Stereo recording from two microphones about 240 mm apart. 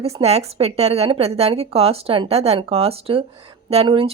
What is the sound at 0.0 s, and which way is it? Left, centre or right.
Speech, right.